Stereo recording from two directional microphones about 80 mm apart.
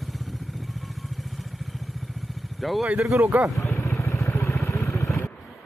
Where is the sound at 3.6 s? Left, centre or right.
Left.